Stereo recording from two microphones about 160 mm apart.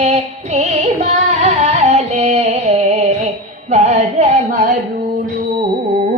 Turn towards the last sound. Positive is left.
turn(degrees=-50)  # may be behind; listen again after turning